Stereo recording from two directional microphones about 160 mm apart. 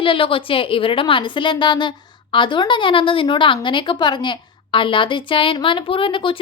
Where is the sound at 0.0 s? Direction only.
35° left (ahead or behind).